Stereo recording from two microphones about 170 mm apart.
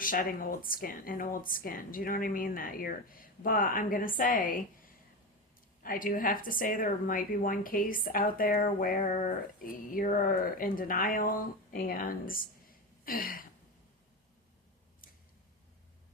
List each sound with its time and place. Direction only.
0.0 s a woman's voice: 55° left (ahead or behind)
5.8 s a woman's voice: 55° left (ahead or behind)
15.0 s a sound: 55° left (ahead or behind)